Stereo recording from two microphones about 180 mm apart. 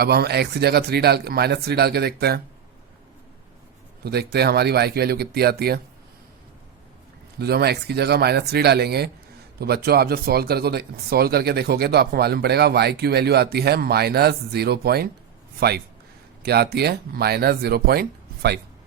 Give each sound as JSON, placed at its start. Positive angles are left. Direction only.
{"t": 0.0, "sound": "speech", "side_deg": -60}
{"t": 4.0, "sound": "speech", "side_deg": -60}
{"t": 7.3, "sound": "speech", "side_deg": -60}
{"t": 16.4, "sound": "speech", "side_deg": -60}